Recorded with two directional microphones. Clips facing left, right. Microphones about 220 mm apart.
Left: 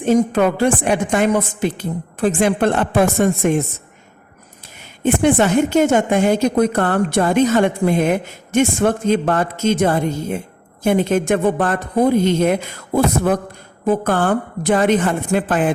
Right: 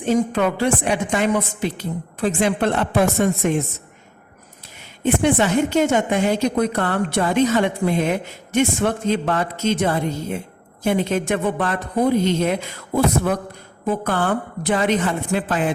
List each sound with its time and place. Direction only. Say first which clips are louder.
0.0 s a woman's voice: left 4 dB; 50° left (ahead or behind)
5.0 s a woman's voice: left 3 dB; 50° left (ahead or behind)
13.8 s a woman's voice: left 4 dB; 45° left (ahead or behind)